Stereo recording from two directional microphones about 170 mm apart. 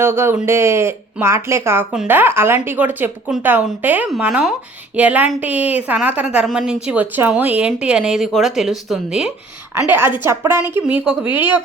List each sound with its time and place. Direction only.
0.0 s speech: 15° right (ahead or behind)